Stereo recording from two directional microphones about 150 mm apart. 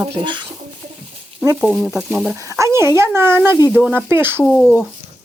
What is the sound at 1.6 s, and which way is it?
Speech, 5° right (ahead or behind).